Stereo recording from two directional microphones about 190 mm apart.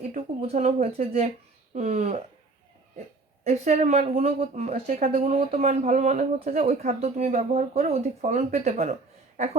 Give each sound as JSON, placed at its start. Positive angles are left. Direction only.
{"t": 0.1, "sound": "speech", "side_deg": -35}
{"t": 3.4, "sound": "speech", "side_deg": -35}